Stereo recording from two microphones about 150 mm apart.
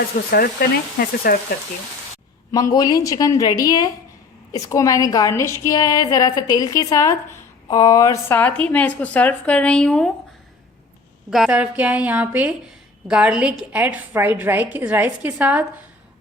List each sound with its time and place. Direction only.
0.3 s speech: 90° left
2.5 s a woman's voice: 25° left (ahead or behind); by 10.1 s 5° left (ahead or behind)
11.3 s a woman's voice: 5° right (ahead or behind)